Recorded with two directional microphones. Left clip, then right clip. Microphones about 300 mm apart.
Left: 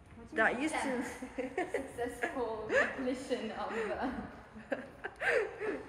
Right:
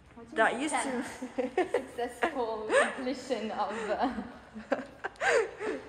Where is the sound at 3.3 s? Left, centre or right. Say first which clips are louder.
Right 5 dB; right.